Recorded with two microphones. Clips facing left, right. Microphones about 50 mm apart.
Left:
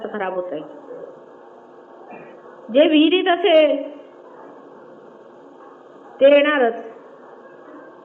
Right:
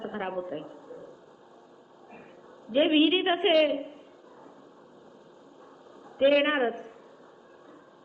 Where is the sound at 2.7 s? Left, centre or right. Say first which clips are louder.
Left 9 dB; left.